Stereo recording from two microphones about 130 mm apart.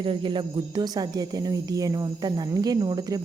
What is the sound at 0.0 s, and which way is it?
Speech, 40° right (ahead or behind).